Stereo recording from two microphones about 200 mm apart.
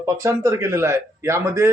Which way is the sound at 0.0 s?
15° right (ahead or behind).